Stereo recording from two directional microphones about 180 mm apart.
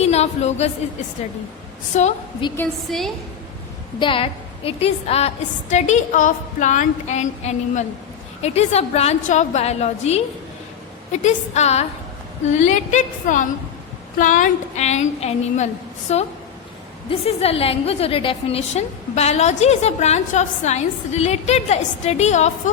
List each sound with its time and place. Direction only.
0.0 s speech: 35° left (ahead or behind)
1.9 s a woman's voice: 40° left (ahead or behind)
2.6 s a woman's voice: centre (ahead or behind)
4.0 s a woman's voice: 30° left (ahead or behind)